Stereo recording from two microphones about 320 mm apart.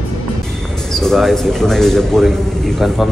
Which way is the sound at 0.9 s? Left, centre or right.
Centre.